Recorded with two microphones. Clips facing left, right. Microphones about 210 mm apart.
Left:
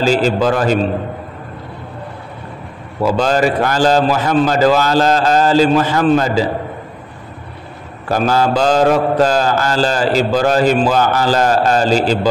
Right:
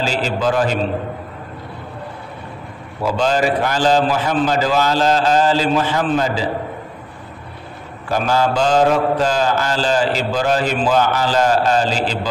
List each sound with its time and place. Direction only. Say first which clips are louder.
0.0 s a man's voice: left 6 dB; 40° left (ahead or behind)
3.0 s a man's voice: left 3 dB; 45° left (ahead or behind)
8.1 s mantra: left 3 dB; 40° left (ahead or behind)